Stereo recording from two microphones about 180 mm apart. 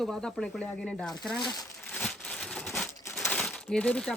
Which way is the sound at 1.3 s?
25° left (ahead or behind).